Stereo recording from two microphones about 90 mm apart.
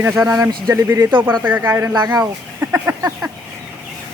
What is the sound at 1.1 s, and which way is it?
Speech, 20° right (ahead or behind).